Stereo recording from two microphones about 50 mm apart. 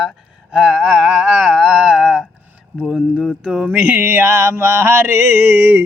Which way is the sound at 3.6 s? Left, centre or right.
Right.